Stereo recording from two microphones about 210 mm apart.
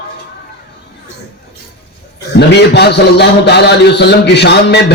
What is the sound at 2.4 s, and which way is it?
A man's voice, 55° left (ahead or behind).